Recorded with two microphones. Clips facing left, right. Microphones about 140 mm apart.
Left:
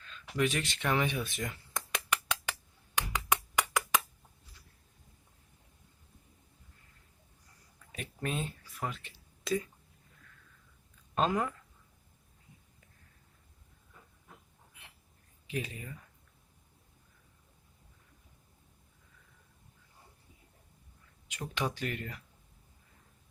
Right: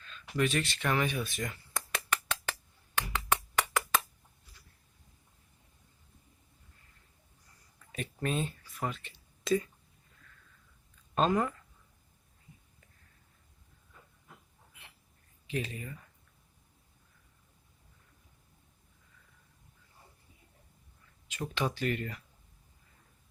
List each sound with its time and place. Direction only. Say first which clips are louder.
0.3 s speech: right 1 dB; 15° left (ahead or behind)
1.9 s finger snapping: even; 15° left (ahead or behind)
7.9 s speech: right 3 dB; 5° left (ahead or behind)
11.1 s speech: right 2 dB; 5° left (ahead or behind)
15.4 s speech: right 2 dB; 10° left (ahead or behind)
21.2 s speech: right 2 dB; 15° left (ahead or behind)